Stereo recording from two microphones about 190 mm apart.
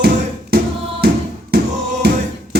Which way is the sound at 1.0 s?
55° right (ahead or behind).